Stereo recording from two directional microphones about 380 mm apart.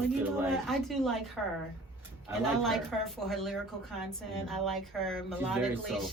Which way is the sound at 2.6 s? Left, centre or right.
Centre.